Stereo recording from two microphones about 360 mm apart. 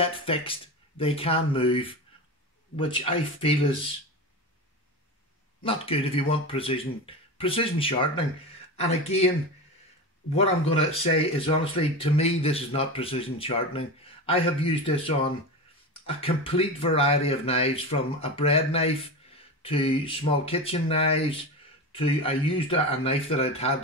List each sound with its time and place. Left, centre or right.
0.0 s speech: centre
5.6 s speech: centre
10.3 s speech: centre